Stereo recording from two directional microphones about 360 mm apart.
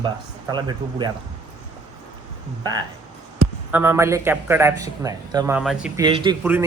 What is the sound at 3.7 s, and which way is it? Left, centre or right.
A man's voice, centre.